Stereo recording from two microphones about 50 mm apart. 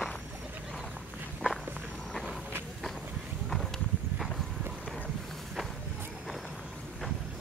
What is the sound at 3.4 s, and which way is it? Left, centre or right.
Walk, centre.